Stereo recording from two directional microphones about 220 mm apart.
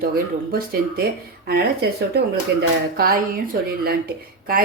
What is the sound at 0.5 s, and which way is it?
Speech, 45° right (ahead or behind).